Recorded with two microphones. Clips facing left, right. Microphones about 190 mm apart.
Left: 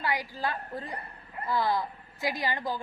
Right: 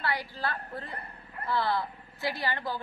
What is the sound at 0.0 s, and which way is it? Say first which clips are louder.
A woman's voice: left 1 dB; 15° left (ahead or behind).